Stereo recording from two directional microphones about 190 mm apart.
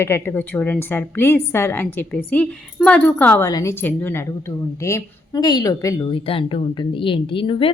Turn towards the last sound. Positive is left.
turn(degrees=30)  # may be behind; listen again after turning